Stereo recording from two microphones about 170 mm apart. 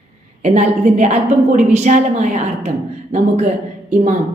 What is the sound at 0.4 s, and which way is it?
A woman's voice, 45° right (ahead or behind).